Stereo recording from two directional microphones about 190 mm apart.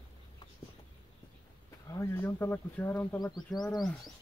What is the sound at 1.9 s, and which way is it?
Speech, 15° left (ahead or behind).